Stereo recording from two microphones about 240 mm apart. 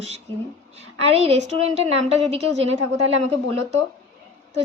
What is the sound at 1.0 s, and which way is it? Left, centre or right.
A woman's voice, right.